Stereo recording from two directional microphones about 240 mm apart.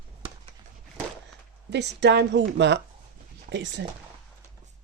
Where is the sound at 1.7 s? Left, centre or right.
Right.